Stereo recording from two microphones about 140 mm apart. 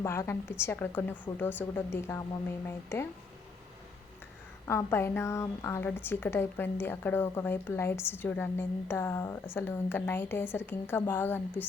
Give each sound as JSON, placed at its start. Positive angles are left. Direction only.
{"t": 0.0, "sound": "a woman's voice", "side_deg": 20}
{"t": 4.6, "sound": "a woman's voice", "side_deg": 20}